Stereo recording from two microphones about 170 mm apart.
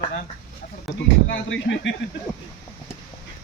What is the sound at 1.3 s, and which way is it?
Speech, 90° left.